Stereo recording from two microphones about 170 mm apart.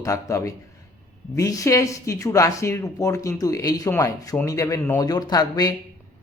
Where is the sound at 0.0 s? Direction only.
20° left (ahead or behind).